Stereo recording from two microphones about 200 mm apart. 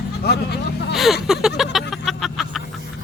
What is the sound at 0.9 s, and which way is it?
Vehicle, centre (ahead or behind).